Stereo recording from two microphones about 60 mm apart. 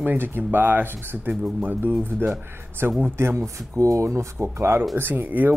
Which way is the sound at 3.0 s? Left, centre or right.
Right.